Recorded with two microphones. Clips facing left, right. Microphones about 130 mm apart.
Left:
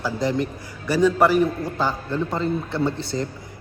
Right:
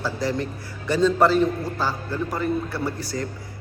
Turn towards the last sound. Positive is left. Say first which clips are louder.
# left 4 dB
turn(degrees=25)  # may be behind; listen again after turning